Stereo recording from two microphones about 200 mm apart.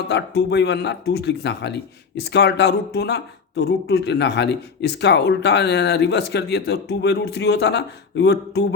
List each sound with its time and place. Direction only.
0.1 s speech: 60° left (ahead or behind)